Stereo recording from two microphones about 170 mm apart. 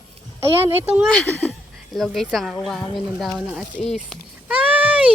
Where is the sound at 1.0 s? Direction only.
5° left (ahead or behind).